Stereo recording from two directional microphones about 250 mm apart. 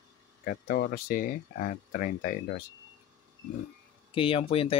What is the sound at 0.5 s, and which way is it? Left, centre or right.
Speech, left.